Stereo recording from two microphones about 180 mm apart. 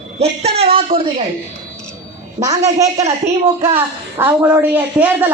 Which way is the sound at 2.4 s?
20° right (ahead or behind).